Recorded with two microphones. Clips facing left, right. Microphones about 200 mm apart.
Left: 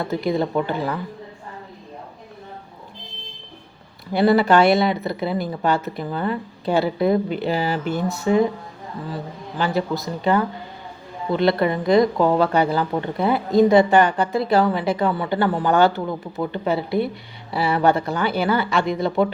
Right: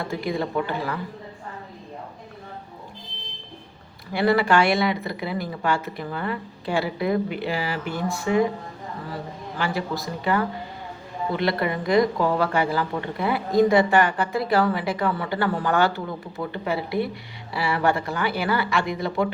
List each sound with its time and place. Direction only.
0.0 s speech: 25° left (ahead or behind)
4.2 s speech: 25° left (ahead or behind)
9.6 s speech: 20° left (ahead or behind)